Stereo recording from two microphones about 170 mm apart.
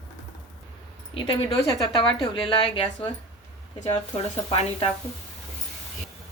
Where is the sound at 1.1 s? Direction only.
30° left (ahead or behind).